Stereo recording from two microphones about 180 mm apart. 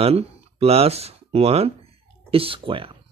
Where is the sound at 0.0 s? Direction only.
35° right (ahead or behind).